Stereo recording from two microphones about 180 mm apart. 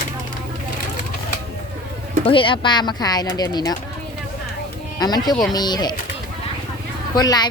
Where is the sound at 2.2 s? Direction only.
30° left (ahead or behind).